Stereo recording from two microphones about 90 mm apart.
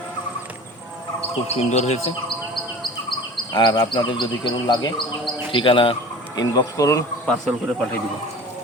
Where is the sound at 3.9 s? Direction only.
65° left (ahead or behind).